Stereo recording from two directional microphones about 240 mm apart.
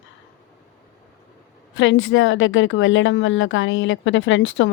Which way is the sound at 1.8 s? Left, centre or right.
Left.